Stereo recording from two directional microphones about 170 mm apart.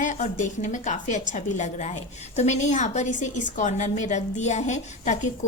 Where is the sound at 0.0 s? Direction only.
45° left (ahead or behind).